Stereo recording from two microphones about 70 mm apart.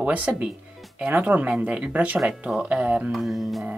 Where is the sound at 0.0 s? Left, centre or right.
Right.